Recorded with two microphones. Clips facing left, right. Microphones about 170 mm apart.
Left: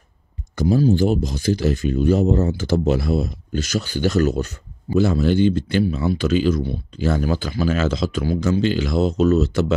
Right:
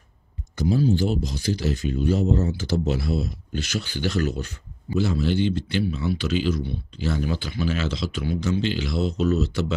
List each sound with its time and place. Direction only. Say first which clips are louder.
0.6 s speech: left 4 dB; 50° left (ahead or behind)